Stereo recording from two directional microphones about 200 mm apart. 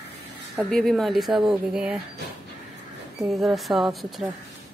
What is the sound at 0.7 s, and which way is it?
Speech, centre (ahead or behind).